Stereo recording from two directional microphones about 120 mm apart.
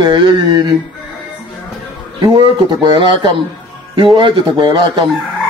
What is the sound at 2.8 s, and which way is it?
Speech, 40° right (ahead or behind).